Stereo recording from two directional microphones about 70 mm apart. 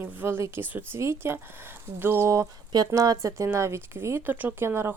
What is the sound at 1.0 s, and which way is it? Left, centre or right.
Speech, right.